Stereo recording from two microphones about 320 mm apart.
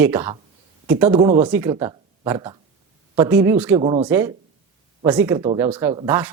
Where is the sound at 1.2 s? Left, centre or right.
Centre.